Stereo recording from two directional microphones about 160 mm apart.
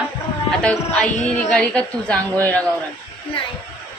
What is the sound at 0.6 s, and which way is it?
A woman's voice, 5° left (ahead or behind).